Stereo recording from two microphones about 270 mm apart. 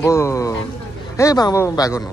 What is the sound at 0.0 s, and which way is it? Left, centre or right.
Speech, centre.